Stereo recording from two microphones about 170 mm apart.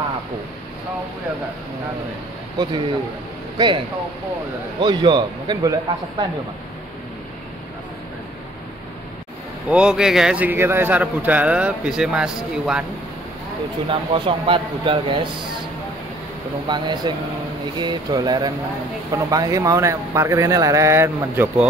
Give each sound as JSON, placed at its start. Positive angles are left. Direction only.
{"t": 3.5, "sound": "a man's voice", "side_deg": -25}
{"t": 9.7, "sound": "a man's voice", "side_deg": -5}
{"t": 13.8, "sound": "speech", "side_deg": -30}
{"t": 16.6, "sound": "a man's voice", "side_deg": -25}